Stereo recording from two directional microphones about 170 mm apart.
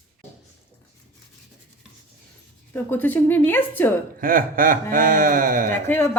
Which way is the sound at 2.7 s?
10° left (ahead or behind).